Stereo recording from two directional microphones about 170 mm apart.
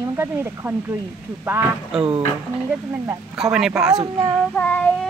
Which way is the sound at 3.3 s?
5° right (ahead or behind).